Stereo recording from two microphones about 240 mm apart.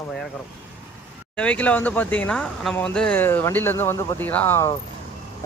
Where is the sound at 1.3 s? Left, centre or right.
Centre.